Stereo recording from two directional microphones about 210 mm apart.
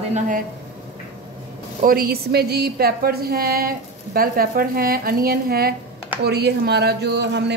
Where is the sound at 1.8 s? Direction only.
45° right (ahead or behind).